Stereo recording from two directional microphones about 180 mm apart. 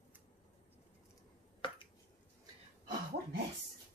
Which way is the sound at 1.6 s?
30° left (ahead or behind).